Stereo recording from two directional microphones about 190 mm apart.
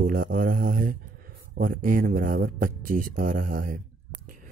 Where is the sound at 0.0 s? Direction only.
50° right (ahead or behind).